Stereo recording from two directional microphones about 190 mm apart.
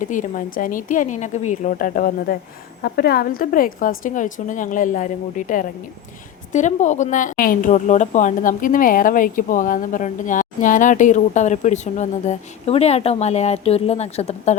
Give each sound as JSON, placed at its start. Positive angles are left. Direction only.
{"t": 0.0, "sound": "a woman's voice", "side_deg": 45}